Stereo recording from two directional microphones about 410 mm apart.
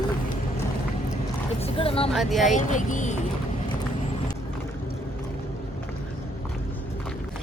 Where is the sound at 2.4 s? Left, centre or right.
Centre.